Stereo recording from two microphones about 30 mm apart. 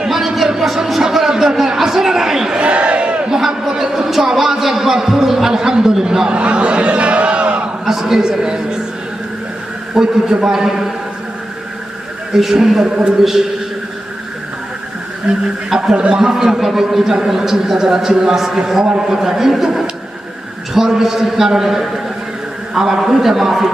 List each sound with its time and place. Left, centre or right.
0.1 s a sound: centre
1.4 s chatter: centre
2.6 s crowd: right
3.2 s a sound: centre
5.5 s speech: right
6.3 s crowd: right
7.9 s a sound: centre
8.2 s a sound: right
9.9 s a man's voice: centre
12.3 s a man's voice: centre
12.8 s speech: right
15.3 s a man's voice: centre
16.5 s a man's voice: centre
18.3 s a man's voice: centre